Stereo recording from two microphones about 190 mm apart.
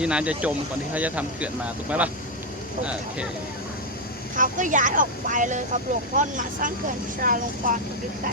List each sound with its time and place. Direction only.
0.0 s speech: 5° right (ahead or behind)
4.4 s speech: 45° right (ahead or behind)